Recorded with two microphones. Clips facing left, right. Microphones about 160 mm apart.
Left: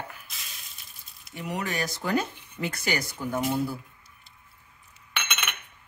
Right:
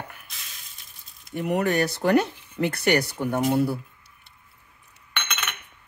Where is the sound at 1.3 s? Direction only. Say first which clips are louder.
Right 8 dB; 55° right (ahead or behind).